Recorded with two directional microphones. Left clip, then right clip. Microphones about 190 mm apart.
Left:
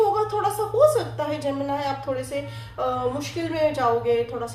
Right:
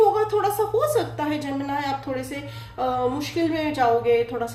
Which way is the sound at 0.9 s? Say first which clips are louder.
Right 1 dB; 40° right (ahead or behind).